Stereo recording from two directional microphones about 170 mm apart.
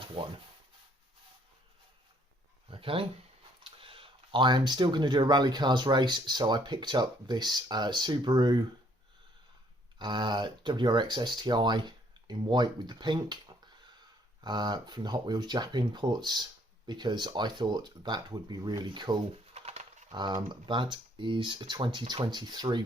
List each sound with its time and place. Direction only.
0.2 s speech: 30° right (ahead or behind)
2.6 s speech: 30° right (ahead or behind)
10.0 s speech: 25° right (ahead or behind)
14.4 s speech: 25° right (ahead or behind)
19.5 s typewriter: 40° right (ahead or behind)
20.1 s speech: 25° right (ahead or behind)